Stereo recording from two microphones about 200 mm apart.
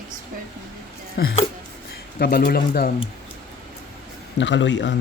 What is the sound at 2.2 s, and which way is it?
Speech, 50° left (ahead or behind).